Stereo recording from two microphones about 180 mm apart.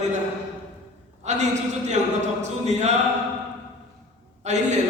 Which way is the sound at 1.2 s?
40° right (ahead or behind).